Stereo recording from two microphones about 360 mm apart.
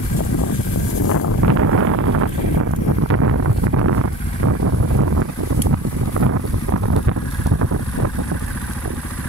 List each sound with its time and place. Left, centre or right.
1.0 s a sound: left
1.6 s wind noise: right
6.1 s boat: right